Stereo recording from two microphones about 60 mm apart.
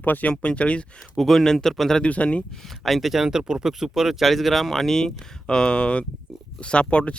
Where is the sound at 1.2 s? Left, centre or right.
Centre.